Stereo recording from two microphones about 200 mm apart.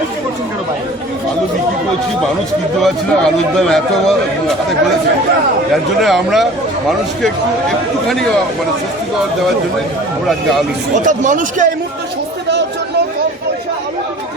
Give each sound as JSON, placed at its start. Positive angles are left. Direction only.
{"t": 2.8, "sound": "a man's voice", "side_deg": 0}
{"t": 5.7, "sound": "a man's voice", "side_deg": 0}
{"t": 8.0, "sound": "a man's voice", "side_deg": 0}
{"t": 11.0, "sound": "speech", "side_deg": -40}